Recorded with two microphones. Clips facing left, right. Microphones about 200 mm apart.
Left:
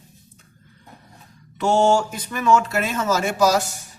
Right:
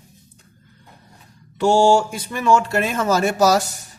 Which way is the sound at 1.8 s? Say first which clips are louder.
Right 2 dB; 30° right (ahead or behind).